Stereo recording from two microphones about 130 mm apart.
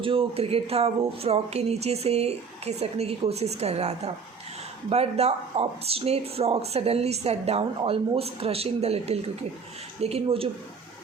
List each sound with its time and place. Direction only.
0.0 s speech: 45° right (ahead or behind)
7.6 s speech: 45° right (ahead or behind)